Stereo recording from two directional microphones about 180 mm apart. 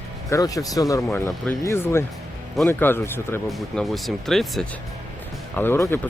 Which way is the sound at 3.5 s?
Centre (ahead or behind).